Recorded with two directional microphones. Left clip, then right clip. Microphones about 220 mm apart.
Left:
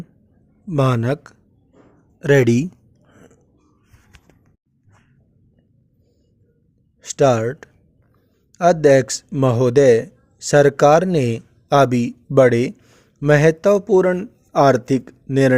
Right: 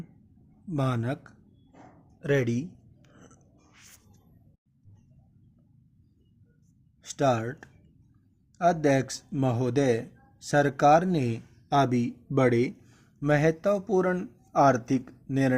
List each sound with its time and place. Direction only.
0.7 s speech: 45° left (ahead or behind)
7.0 s a man's voice: 40° left (ahead or behind)